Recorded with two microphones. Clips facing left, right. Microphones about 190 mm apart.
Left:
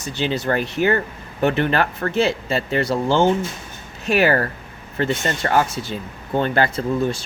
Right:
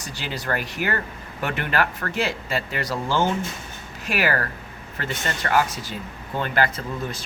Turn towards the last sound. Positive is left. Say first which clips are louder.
# left 9 dB
turn(degrees=30)  # may be behind; listen again after turning